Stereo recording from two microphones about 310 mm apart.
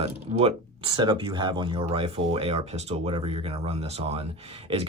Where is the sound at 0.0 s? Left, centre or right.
Centre.